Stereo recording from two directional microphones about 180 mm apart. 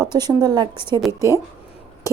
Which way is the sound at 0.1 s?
20° right (ahead or behind).